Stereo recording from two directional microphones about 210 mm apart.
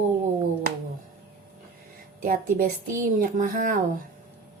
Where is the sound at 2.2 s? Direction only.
40° right (ahead or behind).